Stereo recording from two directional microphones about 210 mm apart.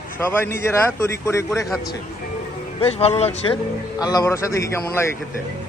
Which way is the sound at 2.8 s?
30° left (ahead or behind).